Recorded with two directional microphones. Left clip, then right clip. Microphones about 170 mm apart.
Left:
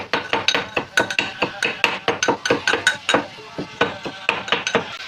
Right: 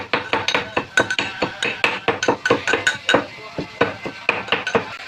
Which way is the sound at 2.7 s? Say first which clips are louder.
Left 2 dB; 5° right (ahead or behind).